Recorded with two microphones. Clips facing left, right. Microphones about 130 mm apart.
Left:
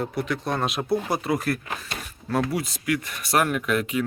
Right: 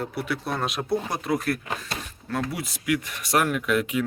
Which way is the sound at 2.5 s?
5° right (ahead or behind).